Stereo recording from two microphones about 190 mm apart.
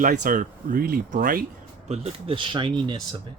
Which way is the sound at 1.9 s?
30° right (ahead or behind).